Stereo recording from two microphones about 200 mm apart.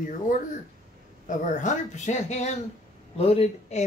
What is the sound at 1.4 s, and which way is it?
Speech, 40° left (ahead or behind).